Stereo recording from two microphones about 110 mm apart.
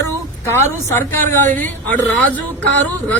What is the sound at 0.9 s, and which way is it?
A man's voice, 20° left (ahead or behind).